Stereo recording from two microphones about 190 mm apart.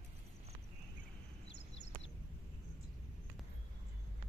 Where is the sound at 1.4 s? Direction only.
70° left (ahead or behind).